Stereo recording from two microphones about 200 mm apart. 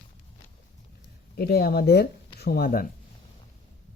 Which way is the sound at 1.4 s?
50° left (ahead or behind).